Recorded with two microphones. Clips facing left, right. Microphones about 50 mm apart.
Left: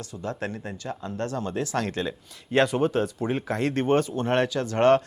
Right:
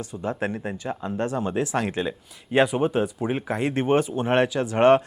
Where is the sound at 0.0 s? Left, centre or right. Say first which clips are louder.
Right 4 dB; centre.